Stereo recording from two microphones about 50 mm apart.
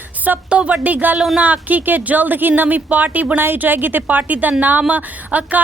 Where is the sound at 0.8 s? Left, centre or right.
Right.